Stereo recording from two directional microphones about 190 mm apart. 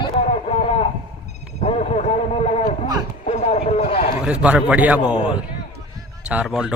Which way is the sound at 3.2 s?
35° left (ahead or behind).